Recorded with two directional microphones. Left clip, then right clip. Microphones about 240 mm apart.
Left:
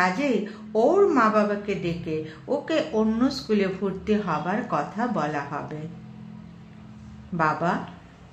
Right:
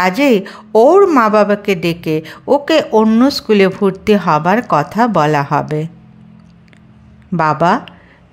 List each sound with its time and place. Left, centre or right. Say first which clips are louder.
0.0 s a woman's voice: right 11 dB; right
7.3 s a woman's voice: right 12 dB; right